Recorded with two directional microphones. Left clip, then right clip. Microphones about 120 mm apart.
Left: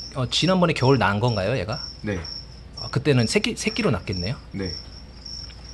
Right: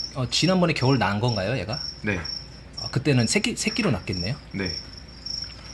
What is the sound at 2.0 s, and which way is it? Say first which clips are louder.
Cricket: right 2 dB; 20° left (ahead or behind).